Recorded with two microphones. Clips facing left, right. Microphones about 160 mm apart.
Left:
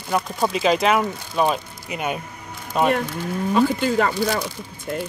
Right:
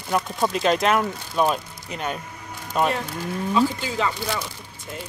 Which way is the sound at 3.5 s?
55° left (ahead or behind).